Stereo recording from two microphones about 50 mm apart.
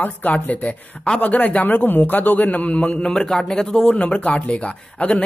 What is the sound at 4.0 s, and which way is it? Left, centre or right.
Speech, left.